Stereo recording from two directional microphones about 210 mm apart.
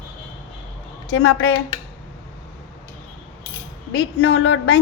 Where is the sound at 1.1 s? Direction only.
60° left (ahead or behind).